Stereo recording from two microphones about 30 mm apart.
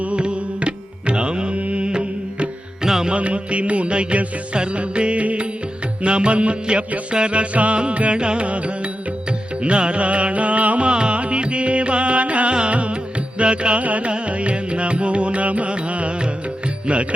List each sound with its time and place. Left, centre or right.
0.2 s music: right
1.5 s music: right
2.8 s music: centre
3.1 s music: right
6.0 s music: right
8.4 s music: right
10.8 s music: right
12.5 s music: right
13.8 s music: right
14.1 s music: right